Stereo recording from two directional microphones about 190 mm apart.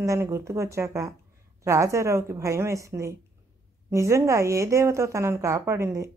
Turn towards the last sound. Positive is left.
turn(degrees=-15)  # may be behind; listen again after turning